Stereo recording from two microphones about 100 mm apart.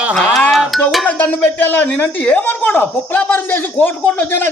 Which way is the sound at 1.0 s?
15° left (ahead or behind).